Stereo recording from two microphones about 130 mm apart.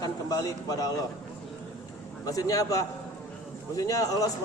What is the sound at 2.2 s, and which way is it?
A man's voice, 25° left (ahead or behind).